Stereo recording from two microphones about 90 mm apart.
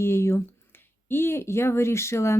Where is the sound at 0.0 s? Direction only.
30° left (ahead or behind).